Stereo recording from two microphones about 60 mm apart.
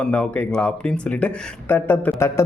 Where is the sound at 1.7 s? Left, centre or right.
Left.